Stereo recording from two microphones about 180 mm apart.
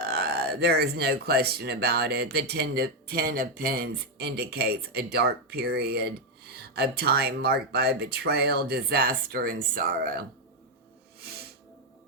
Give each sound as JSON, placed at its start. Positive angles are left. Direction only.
{"t": 0.0, "sound": "speech", "side_deg": -60}
{"t": 11.2, "sound": "music", "side_deg": -60}